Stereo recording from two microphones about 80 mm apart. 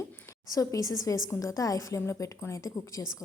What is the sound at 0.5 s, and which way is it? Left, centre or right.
A woman's voice, left.